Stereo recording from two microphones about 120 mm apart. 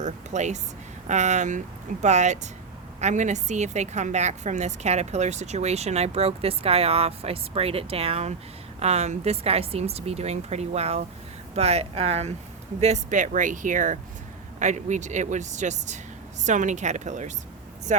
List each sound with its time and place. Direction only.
0.0 s a woman's voice: 75° right (ahead or behind)
3.0 s a woman's voice: 90° right; by 12.3 s 60° right (ahead or behind)
12.8 s speech: 80° right